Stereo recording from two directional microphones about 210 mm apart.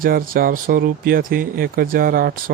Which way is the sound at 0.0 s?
45° right (ahead or behind).